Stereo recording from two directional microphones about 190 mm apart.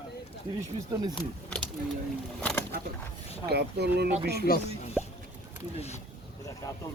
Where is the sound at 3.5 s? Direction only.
60° right (ahead or behind).